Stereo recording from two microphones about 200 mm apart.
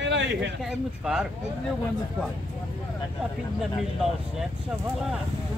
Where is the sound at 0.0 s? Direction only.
65° right (ahead or behind).